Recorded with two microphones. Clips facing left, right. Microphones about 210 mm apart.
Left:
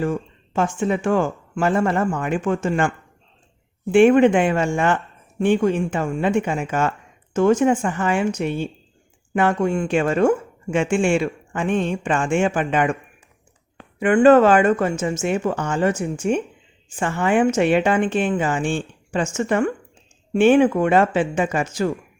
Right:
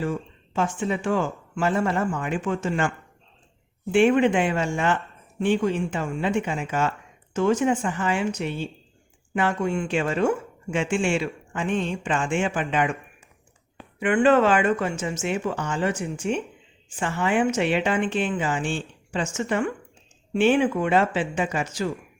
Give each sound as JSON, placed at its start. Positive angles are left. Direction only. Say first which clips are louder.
{"t": 0.0, "sound": "speech", "louder": "left 4 dB", "side_deg": 50}
{"t": 3.9, "sound": "speech", "louder": "left 5 dB", "side_deg": 50}
{"t": 14.0, "sound": "speech", "louder": "left 6 dB", "side_deg": 45}